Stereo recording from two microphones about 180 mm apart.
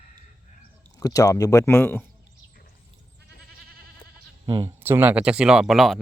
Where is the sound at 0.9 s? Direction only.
20° left (ahead or behind).